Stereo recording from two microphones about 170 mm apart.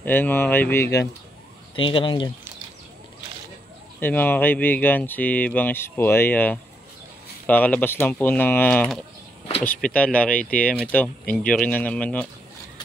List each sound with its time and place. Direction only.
0.0 s speech: 10° left (ahead or behind)
1.8 s speech: 30° left (ahead or behind)
4.0 s speech: 10° left (ahead or behind)